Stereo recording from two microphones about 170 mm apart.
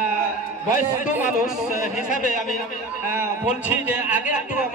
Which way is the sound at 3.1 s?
10° right (ahead or behind).